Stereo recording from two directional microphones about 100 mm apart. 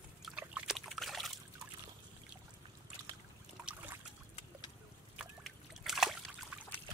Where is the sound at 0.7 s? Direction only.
Centre (ahead or behind).